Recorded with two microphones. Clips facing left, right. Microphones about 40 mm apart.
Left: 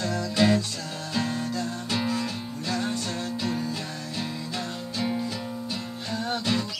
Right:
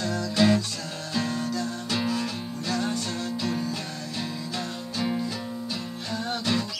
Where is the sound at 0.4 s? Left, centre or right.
Centre.